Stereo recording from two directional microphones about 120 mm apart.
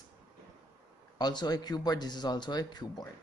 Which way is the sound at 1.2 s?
35° left (ahead or behind).